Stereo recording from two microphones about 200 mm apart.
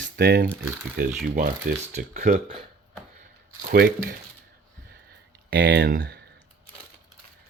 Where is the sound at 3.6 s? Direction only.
45° right (ahead or behind).